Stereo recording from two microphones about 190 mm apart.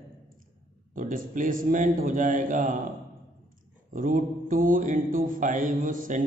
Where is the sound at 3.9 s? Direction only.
45° right (ahead or behind).